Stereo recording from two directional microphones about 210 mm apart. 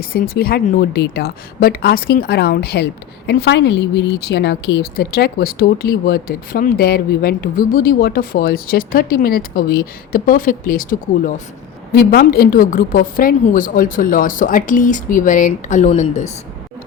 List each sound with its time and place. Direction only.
0.1 s a woman's voice: 45° left (ahead or behind)